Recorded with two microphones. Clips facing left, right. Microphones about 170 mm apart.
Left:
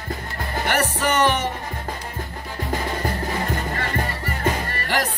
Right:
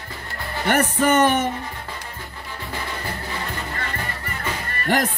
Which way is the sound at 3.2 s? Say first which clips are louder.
Left 5 dB; 40° left (ahead or behind).